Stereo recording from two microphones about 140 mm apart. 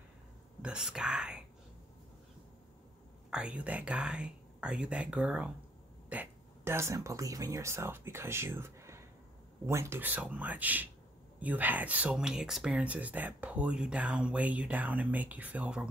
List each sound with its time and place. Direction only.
0.6 s speech: 5° right (ahead or behind)
3.3 s speech: 5° right (ahead or behind)